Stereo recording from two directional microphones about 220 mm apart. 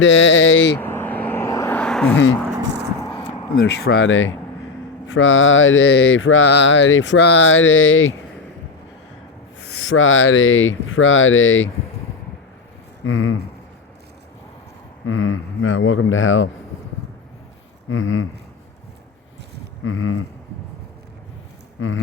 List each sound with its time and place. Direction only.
0.0 s mantra: 60° left (ahead or behind)
0.8 s vehicle: 10° left (ahead or behind)
3.5 s speech: 50° left (ahead or behind)
5.0 s mantra: 60° left (ahead or behind)
9.8 s mantra: 65° left (ahead or behind)
13.1 s mantra: 65° left (ahead or behind)
15.0 s mantra: 65° left (ahead or behind)
17.8 s mantra: 60° left (ahead or behind)
19.8 s speech: 65° left (ahead or behind)
21.8 s speech: 65° left (ahead or behind)